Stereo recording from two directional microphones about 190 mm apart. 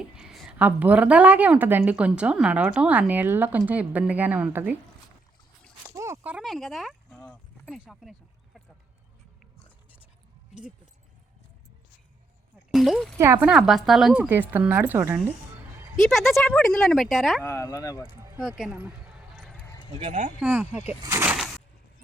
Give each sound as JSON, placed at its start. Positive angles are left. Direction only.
{"t": 0.0, "sound": "a woman's voice", "side_deg": -5}
{"t": 5.9, "sound": "speech", "side_deg": -15}
{"t": 12.7, "sound": "speech", "side_deg": 0}
{"t": 13.1, "sound": "a woman's voice", "side_deg": -15}
{"t": 13.5, "sound": "a woman's voice", "side_deg": 0}
{"t": 16.0, "sound": "speech", "side_deg": 0}
{"t": 17.4, "sound": "speech", "side_deg": 15}
{"t": 18.2, "sound": "music", "side_deg": -10}
{"t": 19.6, "sound": "a sound", "side_deg": 25}
{"t": 19.9, "sound": "speech", "side_deg": -30}
{"t": 20.4, "sound": "a woman's voice", "side_deg": -10}